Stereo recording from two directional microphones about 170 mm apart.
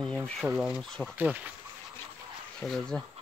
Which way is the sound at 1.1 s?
10° right (ahead or behind).